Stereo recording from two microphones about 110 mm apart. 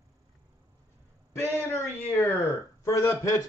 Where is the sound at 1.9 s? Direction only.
20° left (ahead or behind).